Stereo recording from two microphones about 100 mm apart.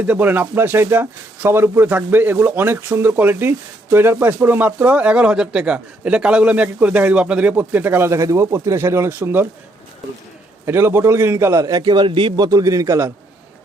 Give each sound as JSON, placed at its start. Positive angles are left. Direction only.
{"t": 0.0, "sound": "speech", "side_deg": -15}
{"t": 10.7, "sound": "speech", "side_deg": -25}
{"t": 11.7, "sound": "a man's voice", "side_deg": -45}
{"t": 12.5, "sound": "a man's voice", "side_deg": -35}